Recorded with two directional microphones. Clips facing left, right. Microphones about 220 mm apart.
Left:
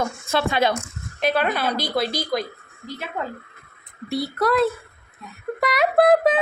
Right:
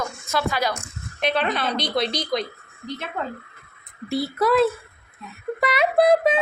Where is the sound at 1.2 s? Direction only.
5° left (ahead or behind).